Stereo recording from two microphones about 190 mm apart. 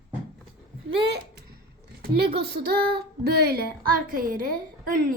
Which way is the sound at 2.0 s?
60° right (ahead or behind).